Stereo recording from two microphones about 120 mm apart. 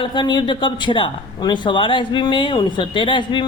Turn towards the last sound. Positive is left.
turn(degrees=45)  # may be behind; listen again after turning